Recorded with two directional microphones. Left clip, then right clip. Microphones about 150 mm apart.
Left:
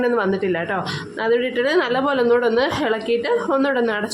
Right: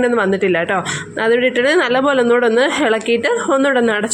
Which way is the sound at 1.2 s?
30° right (ahead or behind).